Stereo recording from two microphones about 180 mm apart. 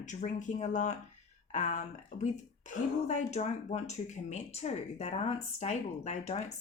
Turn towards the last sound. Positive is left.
turn(degrees=35)  # may be behind; listen again after turning